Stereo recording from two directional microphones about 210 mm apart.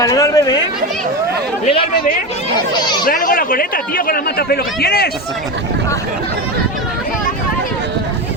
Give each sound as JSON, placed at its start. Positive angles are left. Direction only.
{"t": 0.0, "sound": "chatter", "side_deg": 15}
{"t": 2.7, "sound": "speech", "side_deg": 20}
{"t": 3.1, "sound": "speech", "side_deg": 40}